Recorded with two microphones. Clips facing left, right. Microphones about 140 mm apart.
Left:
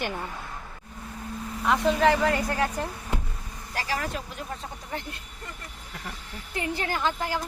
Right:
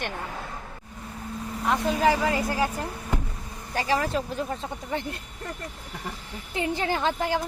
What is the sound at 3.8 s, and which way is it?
Speech, 30° right (ahead or behind).